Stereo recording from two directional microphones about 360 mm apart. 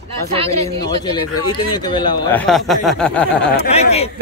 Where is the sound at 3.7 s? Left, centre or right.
Centre.